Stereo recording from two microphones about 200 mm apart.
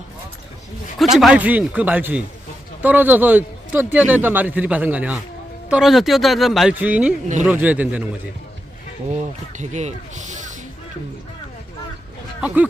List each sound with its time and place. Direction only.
1.1 s speech: 5° right (ahead or behind)
9.0 s speech: 35° right (ahead or behind)
12.4 s speech: 5° right (ahead or behind)